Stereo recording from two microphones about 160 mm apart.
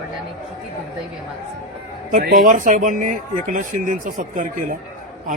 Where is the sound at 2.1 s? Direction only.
70° right (ahead or behind).